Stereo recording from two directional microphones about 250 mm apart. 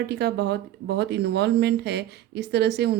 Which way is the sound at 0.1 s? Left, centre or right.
Right.